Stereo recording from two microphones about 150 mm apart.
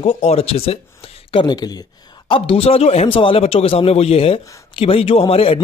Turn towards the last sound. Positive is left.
turn(degrees=40)  # may be behind; listen again after turning